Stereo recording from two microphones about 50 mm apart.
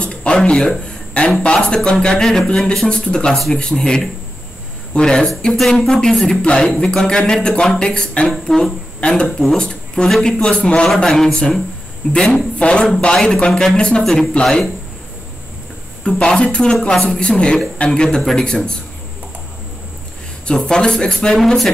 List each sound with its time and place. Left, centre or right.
0.0 s a sound: left
1.4 s a man's voice: centre
11.1 s speech: centre
13.5 s speech: centre
13.7 s speech: centre
14.4 s speech: centre
16.0 s speech: centre
20.4 s speech: centre